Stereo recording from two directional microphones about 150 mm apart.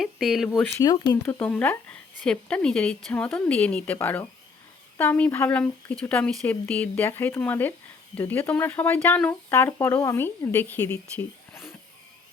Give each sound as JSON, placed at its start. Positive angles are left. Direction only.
{"t": 0.0, "sound": "speech", "side_deg": 0}
{"t": 0.8, "sound": "speech", "side_deg": 25}
{"t": 1.4, "sound": "speech", "side_deg": 10}